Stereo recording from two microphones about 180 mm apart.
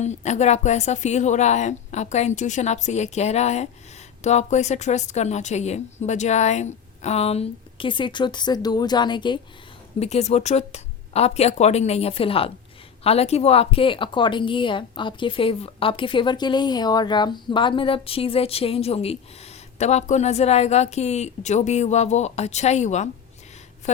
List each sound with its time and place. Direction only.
0.0 s a woman's voice: 40° left (ahead or behind)
10.0 s a woman's voice: 35° left (ahead or behind)